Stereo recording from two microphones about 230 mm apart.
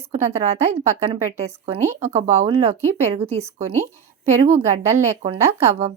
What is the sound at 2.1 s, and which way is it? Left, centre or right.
A woman's voice, right.